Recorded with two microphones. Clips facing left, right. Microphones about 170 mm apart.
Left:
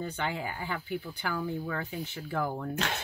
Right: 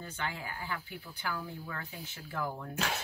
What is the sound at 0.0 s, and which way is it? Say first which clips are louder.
Speech: left 6 dB; 70° left (ahead or behind).